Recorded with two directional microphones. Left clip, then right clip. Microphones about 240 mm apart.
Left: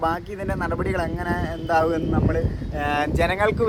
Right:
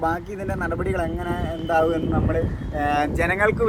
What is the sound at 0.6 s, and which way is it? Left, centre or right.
Speech, centre.